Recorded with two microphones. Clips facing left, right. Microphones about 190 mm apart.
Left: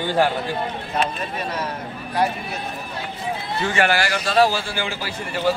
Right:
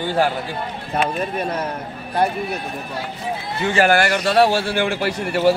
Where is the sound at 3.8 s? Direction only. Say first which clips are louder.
Right 5 dB; 50° right (ahead or behind).